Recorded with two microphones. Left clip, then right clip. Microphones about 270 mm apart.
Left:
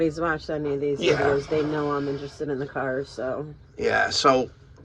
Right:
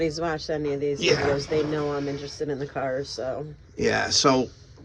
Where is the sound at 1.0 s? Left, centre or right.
Centre.